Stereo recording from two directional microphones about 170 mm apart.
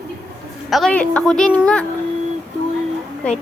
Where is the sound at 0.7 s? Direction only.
5° left (ahead or behind).